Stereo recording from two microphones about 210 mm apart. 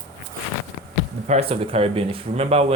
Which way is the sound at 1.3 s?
30° right (ahead or behind).